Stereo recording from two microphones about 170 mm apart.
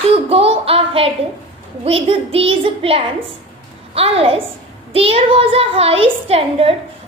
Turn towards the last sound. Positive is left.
turn(degrees=-35)  # may be behind; listen again after turning